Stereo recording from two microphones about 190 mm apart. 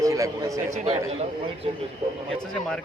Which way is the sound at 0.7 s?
40° right (ahead or behind).